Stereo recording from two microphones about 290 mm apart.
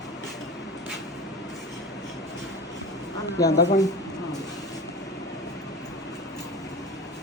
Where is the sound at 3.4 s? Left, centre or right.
Left.